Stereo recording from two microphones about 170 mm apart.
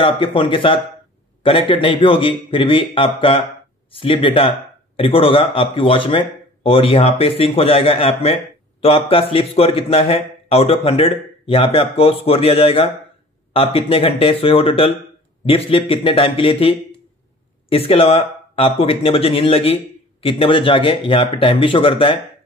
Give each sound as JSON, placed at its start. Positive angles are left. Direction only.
{"t": 0.0, "sound": "speech", "side_deg": 30}